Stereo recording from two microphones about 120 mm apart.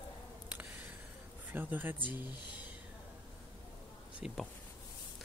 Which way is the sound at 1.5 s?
15° right (ahead or behind).